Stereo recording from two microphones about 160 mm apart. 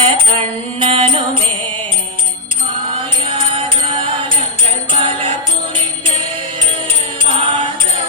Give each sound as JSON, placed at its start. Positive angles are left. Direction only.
{"t": 0.0, "sound": "mantra", "side_deg": -35}
{"t": 3.5, "sound": "music", "side_deg": -35}
{"t": 7.3, "sound": "music", "side_deg": -30}